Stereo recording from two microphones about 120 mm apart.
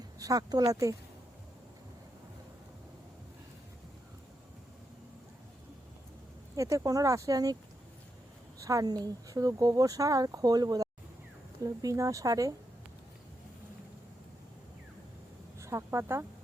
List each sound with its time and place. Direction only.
0.2 s speech: 30° right (ahead or behind)
6.6 s speech: 25° right (ahead or behind)
8.5 s speech: 25° right (ahead or behind)
15.5 s a sound: 25° right (ahead or behind)